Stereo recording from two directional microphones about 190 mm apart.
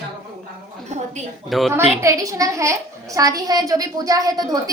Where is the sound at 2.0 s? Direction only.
15° right (ahead or behind).